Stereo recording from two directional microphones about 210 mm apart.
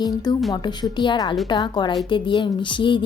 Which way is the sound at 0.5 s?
20° left (ahead or behind).